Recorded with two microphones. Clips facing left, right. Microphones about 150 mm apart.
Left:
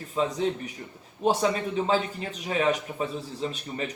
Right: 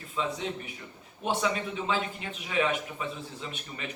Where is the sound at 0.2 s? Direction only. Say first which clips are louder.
Left 6 dB; 40° left (ahead or behind).